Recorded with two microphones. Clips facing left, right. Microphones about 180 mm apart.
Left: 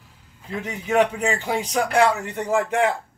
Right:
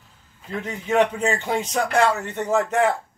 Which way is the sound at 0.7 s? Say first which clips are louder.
Even; 15° left (ahead or behind).